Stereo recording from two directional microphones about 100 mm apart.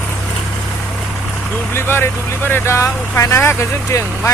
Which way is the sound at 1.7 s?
25° left (ahead or behind).